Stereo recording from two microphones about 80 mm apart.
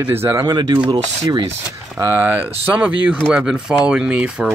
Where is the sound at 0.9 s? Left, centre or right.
Right.